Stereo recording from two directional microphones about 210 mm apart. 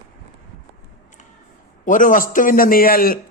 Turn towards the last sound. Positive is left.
turn(degrees=45)  # may be behind; listen again after turning